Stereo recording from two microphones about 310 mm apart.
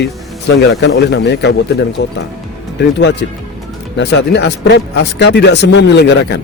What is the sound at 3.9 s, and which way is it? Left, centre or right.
A man's voice, left.